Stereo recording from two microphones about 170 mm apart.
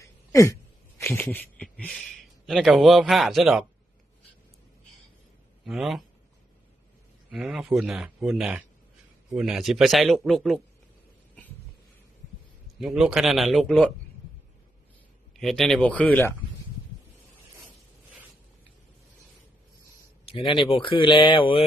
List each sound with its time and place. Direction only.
0.0 s a sound: 20° left (ahead or behind)
0.9 s speech: 15° left (ahead or behind)
5.6 s speech: centre (ahead or behind)
7.3 s speech: 5° right (ahead or behind)
12.8 s speech: 5° right (ahead or behind)
15.3 s speech: centre (ahead or behind)
20.2 s speech: 30° left (ahead or behind)